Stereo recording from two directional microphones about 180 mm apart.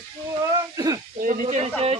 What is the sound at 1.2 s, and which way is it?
Speech, 45° right (ahead or behind).